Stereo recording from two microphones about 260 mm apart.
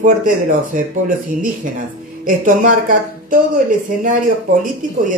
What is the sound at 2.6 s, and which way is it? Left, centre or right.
Speech, right.